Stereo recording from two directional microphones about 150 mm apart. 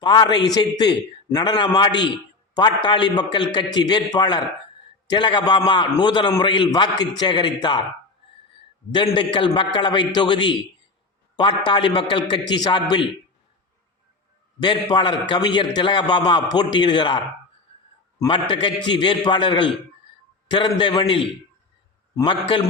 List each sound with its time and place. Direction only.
0.0 s a man's voice: 30° left (ahead or behind)
9.1 s a man's voice: 35° left (ahead or behind)
14.6 s a man's voice: 30° left (ahead or behind)
18.3 s a man's voice: 35° left (ahead or behind)